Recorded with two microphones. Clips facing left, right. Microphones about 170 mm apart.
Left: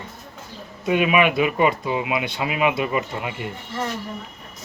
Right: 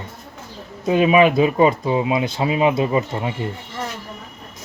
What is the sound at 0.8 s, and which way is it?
Speech, 30° right (ahead or behind).